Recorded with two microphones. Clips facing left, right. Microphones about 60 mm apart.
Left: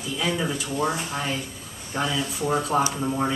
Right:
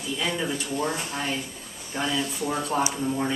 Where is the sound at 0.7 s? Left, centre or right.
Centre.